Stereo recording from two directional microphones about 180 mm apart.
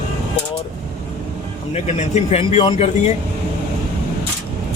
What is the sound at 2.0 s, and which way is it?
Speech, 35° left (ahead or behind).